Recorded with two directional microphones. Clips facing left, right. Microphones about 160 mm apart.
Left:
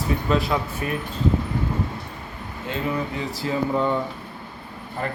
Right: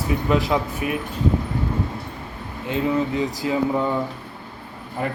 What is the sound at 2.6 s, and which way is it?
Speech, 20° right (ahead or behind).